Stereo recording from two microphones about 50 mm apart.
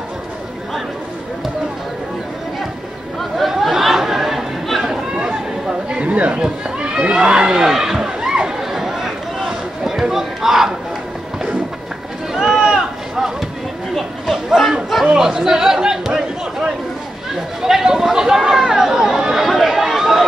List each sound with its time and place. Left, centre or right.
3.3 s chatter: centre
5.1 s chatter: centre
5.9 s a sound: right; by 10.7 s centre
12.4 s a sound: centre
13.9 s chatter: centre
17.6 s chatter: centre